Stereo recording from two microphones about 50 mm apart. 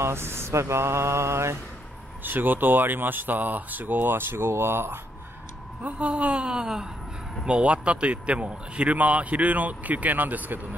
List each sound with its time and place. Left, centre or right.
0.0 s mantra: right
2.2 s speech: right
5.8 s a man's voice: right